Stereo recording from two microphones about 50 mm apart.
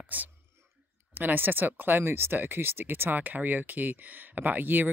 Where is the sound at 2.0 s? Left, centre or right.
Right.